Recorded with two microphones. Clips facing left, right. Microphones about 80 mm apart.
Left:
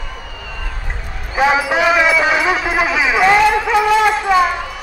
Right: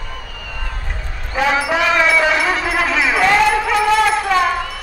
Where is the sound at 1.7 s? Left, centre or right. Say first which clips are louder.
Left 2 dB; centre.